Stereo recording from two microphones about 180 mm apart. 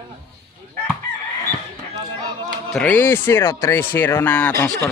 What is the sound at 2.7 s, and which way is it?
Speech, 10° left (ahead or behind).